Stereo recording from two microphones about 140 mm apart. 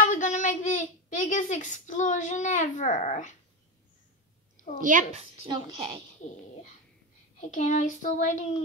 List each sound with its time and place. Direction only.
0.0 s a woman's voice: 65° left (ahead or behind)
4.6 s a woman's voice: 75° right (ahead or behind)
5.5 s a woman's voice: 35° right (ahead or behind)
7.3 s child singing: 60° left (ahead or behind)